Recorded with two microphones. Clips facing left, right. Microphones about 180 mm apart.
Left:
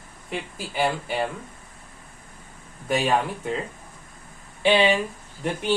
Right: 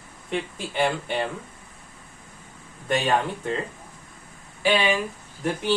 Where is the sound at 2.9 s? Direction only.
5° left (ahead or behind).